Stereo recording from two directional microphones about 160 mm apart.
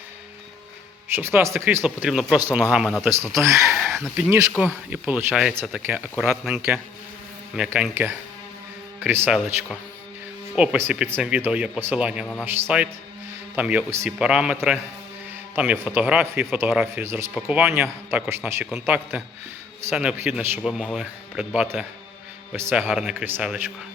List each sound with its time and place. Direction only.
1.1 s speech: 15° right (ahead or behind)
3.0 s speech: 15° right (ahead or behind)
3.7 s a sound: centre (ahead or behind)
4.3 s a man's voice: 10° right (ahead or behind)
10.5 s a man's voice: 5° right (ahead or behind)
20.6 s a man's voice: centre (ahead or behind)